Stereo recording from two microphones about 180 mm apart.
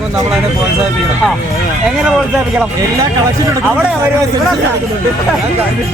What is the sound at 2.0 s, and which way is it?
Speech, centre (ahead or behind).